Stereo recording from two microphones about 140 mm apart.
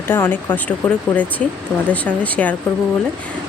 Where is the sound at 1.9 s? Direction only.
10° left (ahead or behind).